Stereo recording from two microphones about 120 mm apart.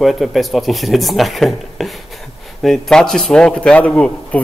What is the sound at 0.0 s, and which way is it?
A man's voice, centre (ahead or behind).